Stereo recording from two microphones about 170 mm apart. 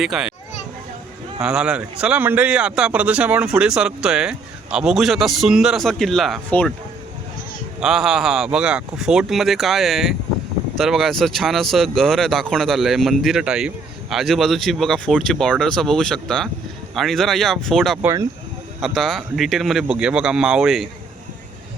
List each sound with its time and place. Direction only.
0.0 s speech: centre (ahead or behind)
1.4 s speech: 5° right (ahead or behind)
7.8 s speech: centre (ahead or behind)
18.0 s speech: 15° right (ahead or behind)
18.8 s speech: centre (ahead or behind)